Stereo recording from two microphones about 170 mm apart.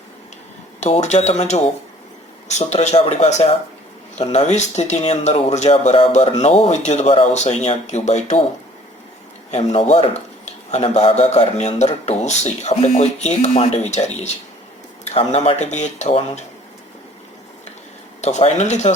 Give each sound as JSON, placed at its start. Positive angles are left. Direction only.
{"t": 0.8, "sound": "a man's voice", "side_deg": 40}
{"t": 9.5, "sound": "a man's voice", "side_deg": 40}
{"t": 18.2, "sound": "a man's voice", "side_deg": 40}